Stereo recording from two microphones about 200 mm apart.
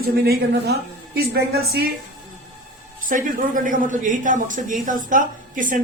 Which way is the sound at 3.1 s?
40° right (ahead or behind).